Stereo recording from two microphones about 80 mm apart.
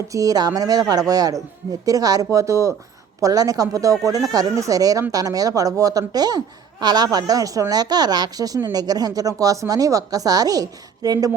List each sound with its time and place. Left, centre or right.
0.1 s a woman's voice: right